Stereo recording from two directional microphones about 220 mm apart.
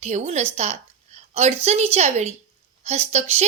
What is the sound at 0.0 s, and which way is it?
A woman's voice, 30° right (ahead or behind).